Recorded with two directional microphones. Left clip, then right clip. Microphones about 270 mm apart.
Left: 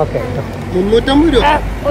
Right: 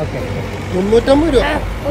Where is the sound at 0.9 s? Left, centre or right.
Centre.